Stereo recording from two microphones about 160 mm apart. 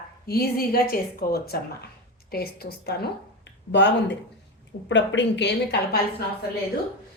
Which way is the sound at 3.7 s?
90° left.